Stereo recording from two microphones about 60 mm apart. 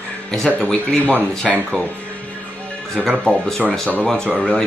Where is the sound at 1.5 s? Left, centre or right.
Centre.